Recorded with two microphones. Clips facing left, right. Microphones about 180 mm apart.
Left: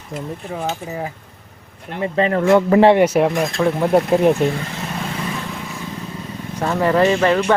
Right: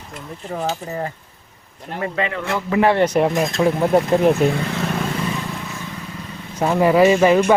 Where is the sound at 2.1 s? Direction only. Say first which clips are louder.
Left 8 dB; 35° left (ahead or behind).